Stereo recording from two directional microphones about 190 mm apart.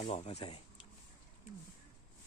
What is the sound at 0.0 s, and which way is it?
Speech, 30° left (ahead or behind).